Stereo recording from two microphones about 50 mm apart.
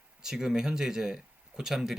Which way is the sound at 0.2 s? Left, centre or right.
Centre.